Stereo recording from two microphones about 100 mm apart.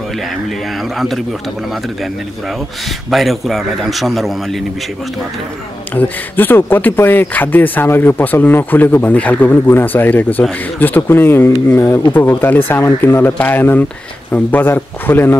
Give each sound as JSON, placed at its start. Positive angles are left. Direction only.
{"t": 0.9, "sound": "a man's voice", "side_deg": 0}
{"t": 3.1, "sound": "a man's voice", "side_deg": 0}
{"t": 5.9, "sound": "speech", "side_deg": 20}